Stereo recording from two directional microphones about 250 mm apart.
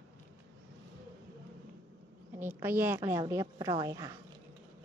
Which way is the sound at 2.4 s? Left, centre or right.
Centre.